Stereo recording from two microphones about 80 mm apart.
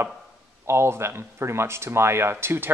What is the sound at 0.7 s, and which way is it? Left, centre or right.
Speech, right.